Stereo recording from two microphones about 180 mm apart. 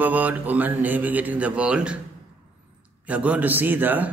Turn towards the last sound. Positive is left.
turn(degrees=-10)  # may be behind; listen again after turning